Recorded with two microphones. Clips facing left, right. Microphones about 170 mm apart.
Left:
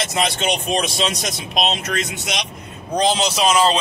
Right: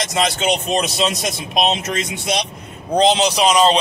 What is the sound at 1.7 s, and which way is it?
A man's voice, 25° right (ahead or behind).